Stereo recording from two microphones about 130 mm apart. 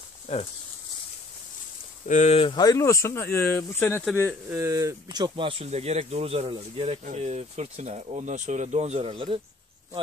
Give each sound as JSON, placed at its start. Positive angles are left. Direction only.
{"t": 2.0, "sound": "speech", "side_deg": 70}
{"t": 2.3, "sound": "speech", "side_deg": 40}
{"t": 2.6, "sound": "speech", "side_deg": 25}
{"t": 4.5, "sound": "speech", "side_deg": -20}
{"t": 5.0, "sound": "speech", "side_deg": -35}